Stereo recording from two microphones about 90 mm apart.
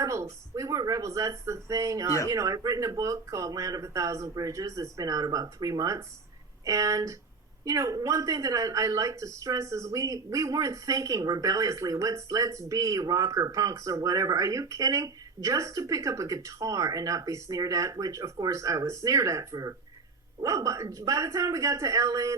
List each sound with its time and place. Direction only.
0.0 s speech: 35° right (ahead or behind)